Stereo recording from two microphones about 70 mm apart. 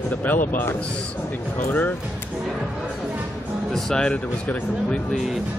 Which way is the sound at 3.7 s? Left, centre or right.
Centre.